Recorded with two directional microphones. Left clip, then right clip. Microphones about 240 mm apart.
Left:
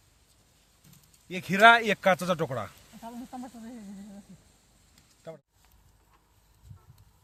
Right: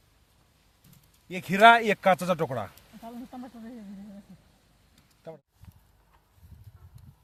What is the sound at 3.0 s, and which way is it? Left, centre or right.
Speech, centre.